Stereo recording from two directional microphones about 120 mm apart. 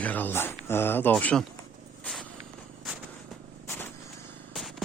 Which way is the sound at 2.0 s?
Centre (ahead or behind).